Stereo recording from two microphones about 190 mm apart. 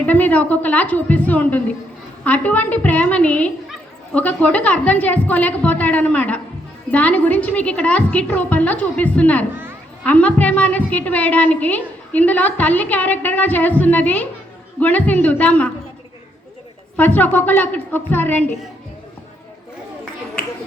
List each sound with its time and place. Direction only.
0.0 s a woman's voice: 10° left (ahead or behind)
17.0 s a woman's voice: 10° left (ahead or behind)